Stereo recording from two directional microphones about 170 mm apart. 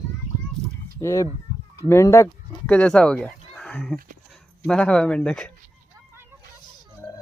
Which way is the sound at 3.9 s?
55° right (ahead or behind).